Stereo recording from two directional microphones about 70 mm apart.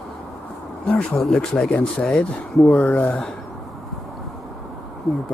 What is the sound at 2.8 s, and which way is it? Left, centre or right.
Speech, left.